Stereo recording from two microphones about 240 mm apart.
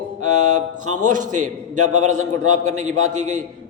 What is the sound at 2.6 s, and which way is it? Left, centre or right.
Speech, right.